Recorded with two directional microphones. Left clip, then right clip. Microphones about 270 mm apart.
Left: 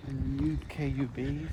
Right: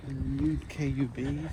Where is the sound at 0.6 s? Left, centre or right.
Left.